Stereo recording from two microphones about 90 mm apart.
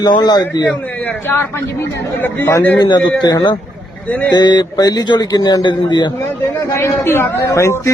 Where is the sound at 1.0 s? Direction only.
25° left (ahead or behind).